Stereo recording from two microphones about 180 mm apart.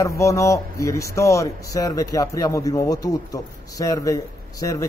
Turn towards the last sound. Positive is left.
turn(degrees=20)  # may be behind; listen again after turning